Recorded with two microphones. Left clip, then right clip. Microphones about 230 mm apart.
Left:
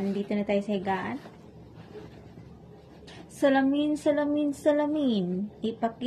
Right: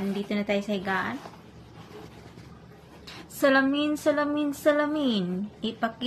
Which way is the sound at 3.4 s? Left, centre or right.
Centre.